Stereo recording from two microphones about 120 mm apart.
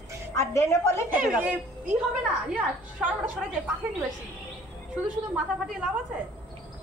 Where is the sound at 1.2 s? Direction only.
10° right (ahead or behind).